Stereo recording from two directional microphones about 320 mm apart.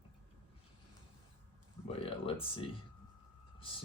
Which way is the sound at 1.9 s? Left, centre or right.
Centre.